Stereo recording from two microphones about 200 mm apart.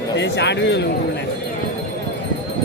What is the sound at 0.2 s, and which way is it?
Speech, 60° left (ahead or behind).